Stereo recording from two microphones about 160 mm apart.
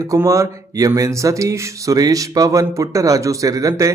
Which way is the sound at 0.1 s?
20° right (ahead or behind).